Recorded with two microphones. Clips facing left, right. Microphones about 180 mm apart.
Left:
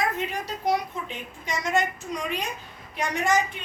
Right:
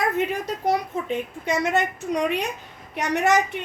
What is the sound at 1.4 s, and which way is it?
A woman's voice, 60° right (ahead or behind).